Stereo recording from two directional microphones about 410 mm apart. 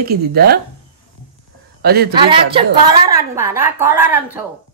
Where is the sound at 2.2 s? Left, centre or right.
Centre.